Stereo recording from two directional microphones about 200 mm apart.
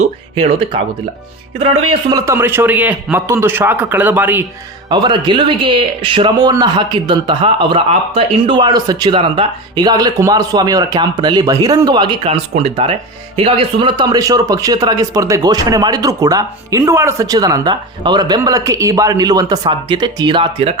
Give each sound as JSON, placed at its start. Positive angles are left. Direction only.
{"t": 0.0, "sound": "a man's voice", "side_deg": -30}
{"t": 4.9, "sound": "speech", "side_deg": -25}